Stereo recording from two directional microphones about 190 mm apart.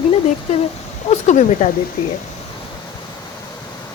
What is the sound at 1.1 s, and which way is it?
Speech, 40° left (ahead or behind).